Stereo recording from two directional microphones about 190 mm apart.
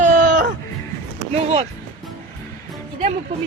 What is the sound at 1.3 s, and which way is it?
Speech, 35° right (ahead or behind).